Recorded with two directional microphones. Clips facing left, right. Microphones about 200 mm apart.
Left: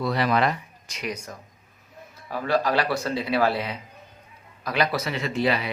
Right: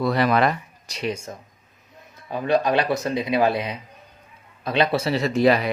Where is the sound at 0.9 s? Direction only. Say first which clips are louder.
Right 5 dB; 30° right (ahead or behind).